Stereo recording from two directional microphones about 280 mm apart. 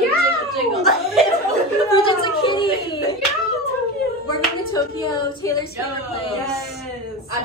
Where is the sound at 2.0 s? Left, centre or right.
Centre.